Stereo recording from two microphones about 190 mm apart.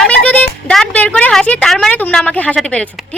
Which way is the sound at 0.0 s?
5° left (ahead or behind).